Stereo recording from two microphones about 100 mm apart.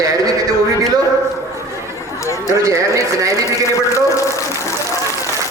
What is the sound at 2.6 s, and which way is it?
Speech, 30° right (ahead or behind).